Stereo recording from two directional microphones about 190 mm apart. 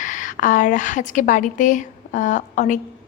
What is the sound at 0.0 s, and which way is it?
A woman's voice, 40° left (ahead or behind).